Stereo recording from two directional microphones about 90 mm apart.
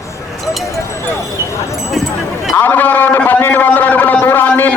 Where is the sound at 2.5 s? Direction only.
20° left (ahead or behind).